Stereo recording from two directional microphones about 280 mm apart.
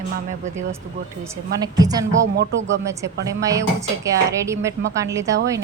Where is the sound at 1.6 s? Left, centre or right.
Centre.